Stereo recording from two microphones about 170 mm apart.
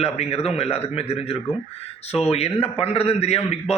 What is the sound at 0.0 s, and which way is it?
A man's voice, 35° left (ahead or behind).